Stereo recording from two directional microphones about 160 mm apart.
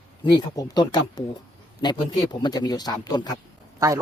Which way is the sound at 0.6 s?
25° left (ahead or behind).